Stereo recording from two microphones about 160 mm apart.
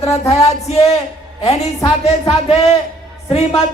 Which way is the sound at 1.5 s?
40° left (ahead or behind).